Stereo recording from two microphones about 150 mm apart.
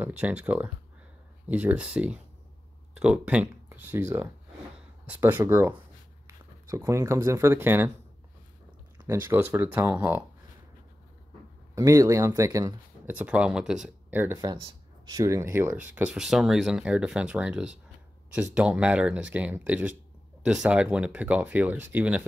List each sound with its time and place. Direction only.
0.0 s speech: 10° right (ahead or behind)
9.0 s speech: 15° right (ahead or behind)
11.7 s speech: 20° right (ahead or behind)